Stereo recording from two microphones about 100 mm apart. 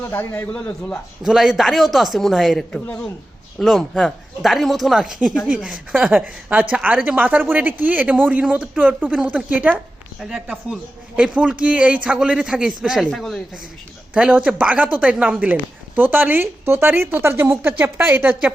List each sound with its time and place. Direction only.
0.0 s a man's voice: 25° left (ahead or behind)
1.2 s speech: 5° right (ahead or behind)
5.9 s a man's voice: 15° right (ahead or behind)
10.2 s a man's voice: 5° right (ahead or behind)
13.1 s speech: 5° left (ahead or behind)
14.1 s a man's voice: 15° right (ahead or behind)